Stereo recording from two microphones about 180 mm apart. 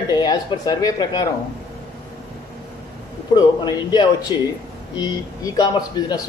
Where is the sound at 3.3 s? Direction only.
20° left (ahead or behind).